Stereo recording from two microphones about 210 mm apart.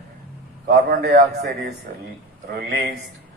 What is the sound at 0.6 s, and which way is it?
Speech, 50° right (ahead or behind).